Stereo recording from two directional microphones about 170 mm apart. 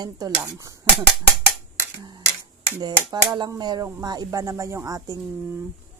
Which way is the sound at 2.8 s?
25° right (ahead or behind).